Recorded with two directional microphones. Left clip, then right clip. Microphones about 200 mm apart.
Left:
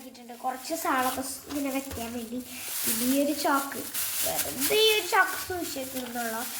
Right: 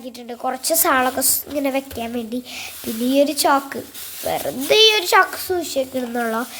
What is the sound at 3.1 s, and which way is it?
A woman's voice, 60° right (ahead or behind).